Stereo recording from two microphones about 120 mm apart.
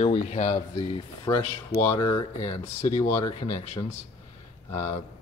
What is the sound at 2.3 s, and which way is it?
Speech, 55° left (ahead or behind).